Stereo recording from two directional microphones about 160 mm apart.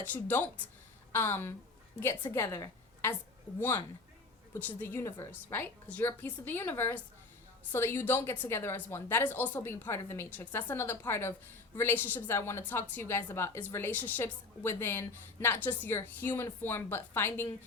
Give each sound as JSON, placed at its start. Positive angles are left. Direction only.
{"t": 0.0, "sound": "a woman's voice", "side_deg": 10}
{"t": 4.8, "sound": "a woman's voice", "side_deg": 15}